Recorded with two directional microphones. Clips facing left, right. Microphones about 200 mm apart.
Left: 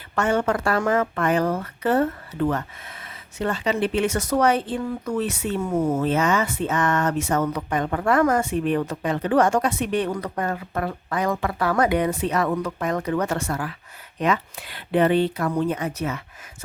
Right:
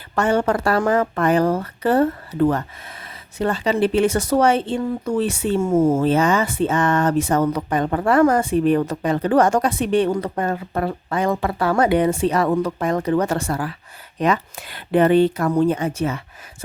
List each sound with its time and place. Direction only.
0.2 s speech: 35° right (ahead or behind)